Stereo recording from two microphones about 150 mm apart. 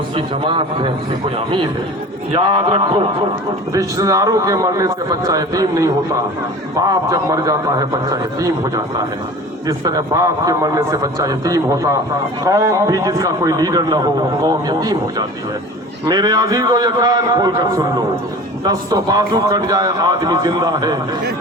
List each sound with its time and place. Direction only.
0.2 s a man's voice: 35° right (ahead or behind)
2.3 s a man's voice: 35° right (ahead or behind)
3.7 s a man's voice: 25° right (ahead or behind)